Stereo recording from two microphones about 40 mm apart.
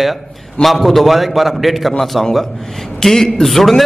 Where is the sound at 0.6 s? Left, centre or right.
Centre.